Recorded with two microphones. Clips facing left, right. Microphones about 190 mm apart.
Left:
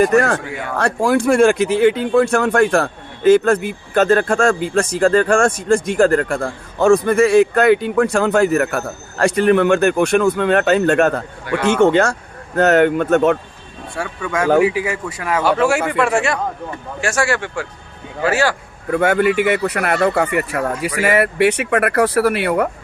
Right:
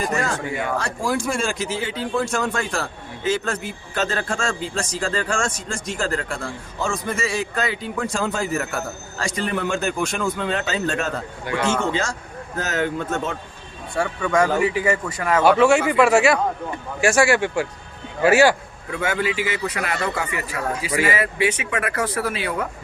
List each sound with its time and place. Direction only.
0.0 s speech: 65° left (ahead or behind)
13.9 s speech: 5° left (ahead or behind); by 18.5 s 15° right (ahead or behind)
18.9 s speech: 60° left (ahead or behind)